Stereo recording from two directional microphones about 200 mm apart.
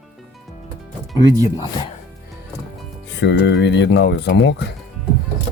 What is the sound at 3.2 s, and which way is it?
Speech, 60° left (ahead or behind).